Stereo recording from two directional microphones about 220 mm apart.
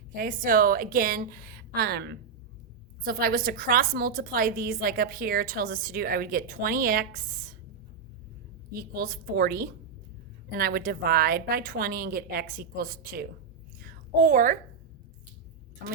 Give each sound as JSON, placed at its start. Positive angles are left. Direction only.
{"t": 0.1, "sound": "a woman's voice", "side_deg": -40}
{"t": 8.7, "sound": "a woman's voice", "side_deg": -45}
{"t": 13.8, "sound": "a sound", "side_deg": -40}